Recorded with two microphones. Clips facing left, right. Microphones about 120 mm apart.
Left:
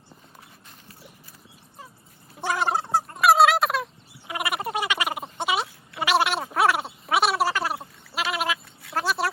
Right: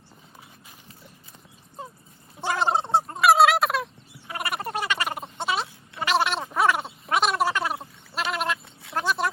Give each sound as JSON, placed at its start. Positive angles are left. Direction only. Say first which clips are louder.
{"t": 2.6, "sound": "fowl", "louder": "right 4 dB", "side_deg": -25}
{"t": 3.2, "sound": "fowl", "louder": "even", "side_deg": 0}
{"t": 4.3, "sound": "gargling", "louder": "left 2 dB", "side_deg": 10}
{"t": 8.9, "sound": "a sound", "louder": "even", "side_deg": 5}